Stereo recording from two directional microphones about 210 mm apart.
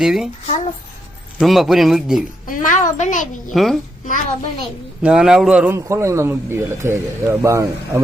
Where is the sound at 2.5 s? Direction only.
40° left (ahead or behind).